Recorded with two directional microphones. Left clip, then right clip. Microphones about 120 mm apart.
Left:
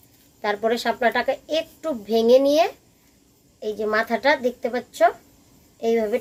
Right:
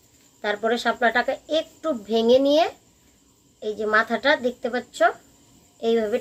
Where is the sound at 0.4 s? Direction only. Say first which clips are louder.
Left 1 dB; 30° left (ahead or behind).